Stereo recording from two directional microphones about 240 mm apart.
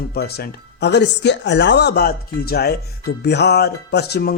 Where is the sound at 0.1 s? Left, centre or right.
Left.